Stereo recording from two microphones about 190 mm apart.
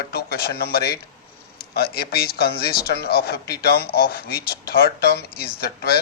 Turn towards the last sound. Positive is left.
turn(degrees=55)  # may be behind; listen again after turning